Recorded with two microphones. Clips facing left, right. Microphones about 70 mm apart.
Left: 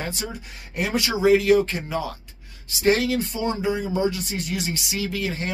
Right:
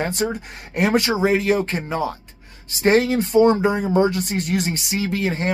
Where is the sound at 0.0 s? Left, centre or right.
Right.